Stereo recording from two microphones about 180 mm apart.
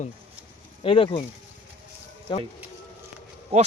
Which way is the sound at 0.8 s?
30° left (ahead or behind).